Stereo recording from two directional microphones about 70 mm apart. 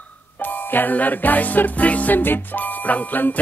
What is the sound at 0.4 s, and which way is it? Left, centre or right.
Music, left.